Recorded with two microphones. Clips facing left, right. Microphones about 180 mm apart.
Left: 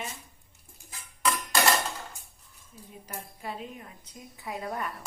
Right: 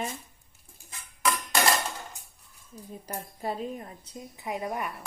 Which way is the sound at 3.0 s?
40° right (ahead or behind).